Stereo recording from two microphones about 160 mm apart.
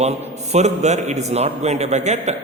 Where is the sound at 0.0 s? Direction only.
45° right (ahead or behind).